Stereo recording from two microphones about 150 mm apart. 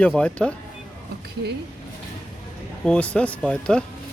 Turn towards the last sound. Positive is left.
turn(degrees=5)  # may be behind; listen again after turning